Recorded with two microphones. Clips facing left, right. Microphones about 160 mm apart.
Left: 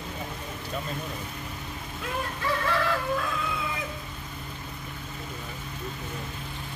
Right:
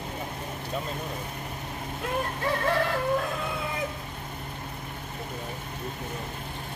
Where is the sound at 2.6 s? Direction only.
45° right (ahead or behind).